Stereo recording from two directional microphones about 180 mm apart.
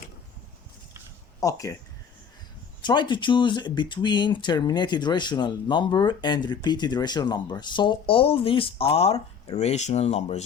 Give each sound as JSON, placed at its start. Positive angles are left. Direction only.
{"t": 1.4, "sound": "speech", "side_deg": 20}
{"t": 2.8, "sound": "speech", "side_deg": 25}